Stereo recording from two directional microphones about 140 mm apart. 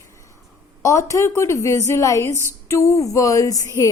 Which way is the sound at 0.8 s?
20° left (ahead or behind).